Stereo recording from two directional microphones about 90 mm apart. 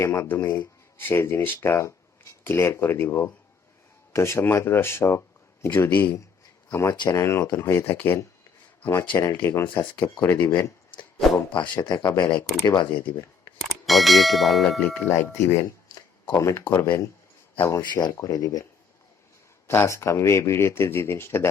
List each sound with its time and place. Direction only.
0.0 s speech: 30° left (ahead or behind)
11.5 s speech: 55° left (ahead or behind)
13.6 s speech: centre (ahead or behind)
14.6 s speech: 15° left (ahead or behind); by 18.6 s 40° left (ahead or behind)
19.6 s speech: 30° left (ahead or behind)